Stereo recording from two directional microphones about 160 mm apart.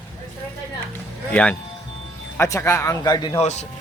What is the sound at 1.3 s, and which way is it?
Speech, 10° left (ahead or behind).